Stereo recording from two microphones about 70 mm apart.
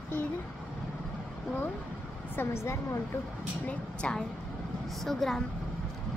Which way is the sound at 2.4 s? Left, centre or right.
Left.